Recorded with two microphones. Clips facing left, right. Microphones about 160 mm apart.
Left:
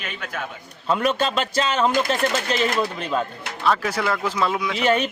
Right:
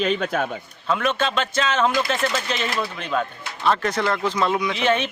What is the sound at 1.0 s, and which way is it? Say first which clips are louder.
Speech: left 1 dB; 35° left (ahead or behind).